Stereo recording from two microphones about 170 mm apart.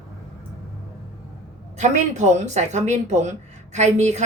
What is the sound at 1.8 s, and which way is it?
Speech, 45° right (ahead or behind).